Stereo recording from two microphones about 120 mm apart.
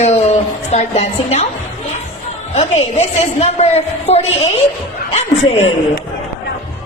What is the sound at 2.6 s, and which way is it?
A woman's voice, 70° left (ahead or behind).